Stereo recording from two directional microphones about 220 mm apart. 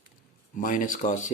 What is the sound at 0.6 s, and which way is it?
Speech, 35° left (ahead or behind).